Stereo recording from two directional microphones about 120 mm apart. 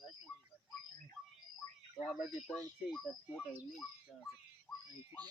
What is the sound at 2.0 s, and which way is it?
Speech, 5° left (ahead or behind).